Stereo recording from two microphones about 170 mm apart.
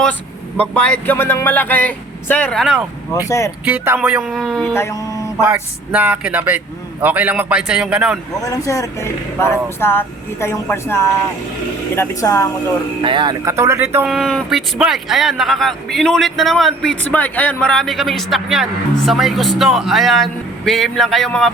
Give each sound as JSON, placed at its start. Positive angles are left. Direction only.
{"t": 0.0, "sound": "speech", "side_deg": 10}
{"t": 3.2, "sound": "speech", "side_deg": 20}
{"t": 3.7, "sound": "speech", "side_deg": -10}
{"t": 5.4, "sound": "speech", "side_deg": -10}
{"t": 8.4, "sound": "speech", "side_deg": 20}
{"t": 13.0, "sound": "speech", "side_deg": -30}
{"t": 14.1, "sound": "speech", "side_deg": 0}